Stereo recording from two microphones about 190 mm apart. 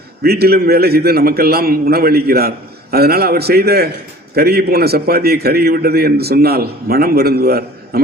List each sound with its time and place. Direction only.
0.2 s a man's voice: 55° right (ahead or behind)